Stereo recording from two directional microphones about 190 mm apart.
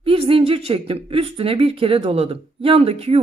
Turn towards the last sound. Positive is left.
turn(degrees=-30)  # may be behind; listen again after turning